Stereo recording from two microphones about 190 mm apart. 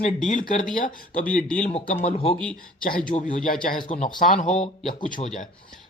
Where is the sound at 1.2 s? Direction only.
5° left (ahead or behind).